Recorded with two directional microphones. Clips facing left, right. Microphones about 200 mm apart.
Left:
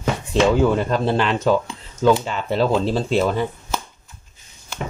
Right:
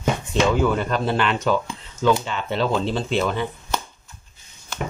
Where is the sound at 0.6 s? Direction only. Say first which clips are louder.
Left 3 dB; 30° left (ahead or behind).